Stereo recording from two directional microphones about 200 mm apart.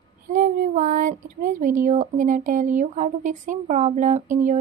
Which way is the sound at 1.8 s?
40° right (ahead or behind).